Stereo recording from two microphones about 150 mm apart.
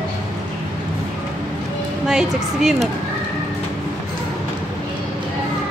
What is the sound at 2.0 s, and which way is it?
Speech, 5° right (ahead or behind).